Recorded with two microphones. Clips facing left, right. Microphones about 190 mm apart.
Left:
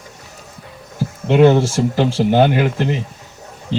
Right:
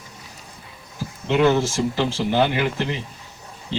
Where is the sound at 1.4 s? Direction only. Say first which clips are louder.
Left 6 dB; 30° left (ahead or behind).